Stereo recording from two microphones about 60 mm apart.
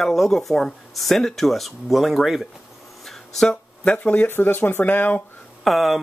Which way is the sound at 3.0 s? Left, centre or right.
Centre.